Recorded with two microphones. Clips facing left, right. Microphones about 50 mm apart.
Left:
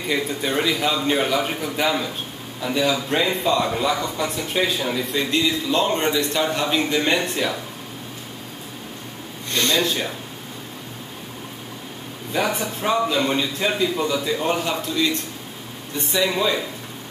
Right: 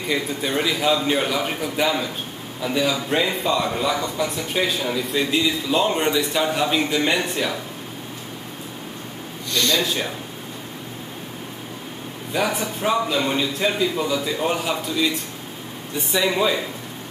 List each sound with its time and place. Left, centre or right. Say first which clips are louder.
0.1 s a man's voice: left 1 dB; centre
9.5 s a man's voice: even; left
12.3 s a man's voice: even; centre